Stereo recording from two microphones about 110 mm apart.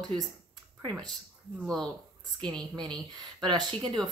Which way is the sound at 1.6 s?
5° left (ahead or behind).